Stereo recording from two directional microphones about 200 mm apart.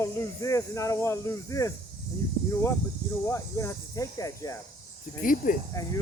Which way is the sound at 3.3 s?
15° left (ahead or behind).